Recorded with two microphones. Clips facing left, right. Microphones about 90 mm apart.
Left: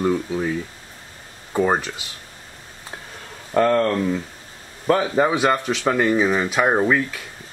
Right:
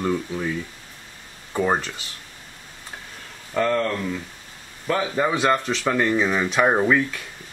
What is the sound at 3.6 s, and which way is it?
Speech, 35° left (ahead or behind).